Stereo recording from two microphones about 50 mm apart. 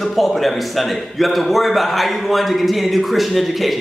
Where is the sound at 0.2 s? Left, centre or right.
Centre.